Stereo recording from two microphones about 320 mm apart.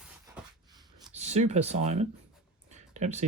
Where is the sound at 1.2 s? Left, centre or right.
Right.